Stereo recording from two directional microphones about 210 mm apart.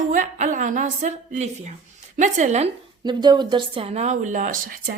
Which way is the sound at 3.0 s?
20° right (ahead or behind).